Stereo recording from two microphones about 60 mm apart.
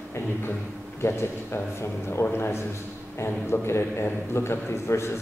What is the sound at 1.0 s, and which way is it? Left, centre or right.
A man's voice, left.